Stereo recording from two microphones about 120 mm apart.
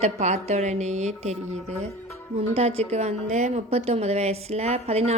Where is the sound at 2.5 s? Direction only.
60° right (ahead or behind).